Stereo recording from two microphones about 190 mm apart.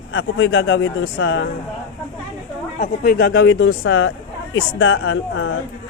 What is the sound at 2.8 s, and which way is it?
A man's voice, 55° left (ahead or behind).